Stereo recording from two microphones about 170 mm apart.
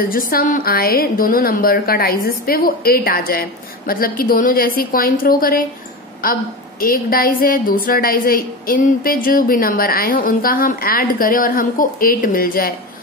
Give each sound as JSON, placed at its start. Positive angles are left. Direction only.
{"t": 0.1, "sound": "a woman's voice", "side_deg": 60}